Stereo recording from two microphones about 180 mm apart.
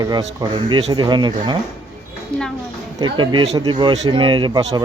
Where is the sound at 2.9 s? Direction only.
25° right (ahead or behind).